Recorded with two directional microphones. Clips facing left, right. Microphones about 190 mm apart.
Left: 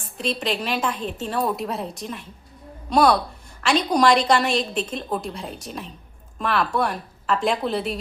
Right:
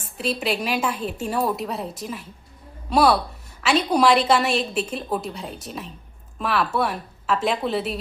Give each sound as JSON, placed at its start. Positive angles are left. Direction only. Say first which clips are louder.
{"t": 0.2, "sound": "a woman's voice", "louder": "right 1 dB", "side_deg": -5}